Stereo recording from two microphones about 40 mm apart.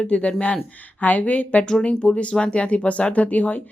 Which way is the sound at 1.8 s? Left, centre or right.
Left.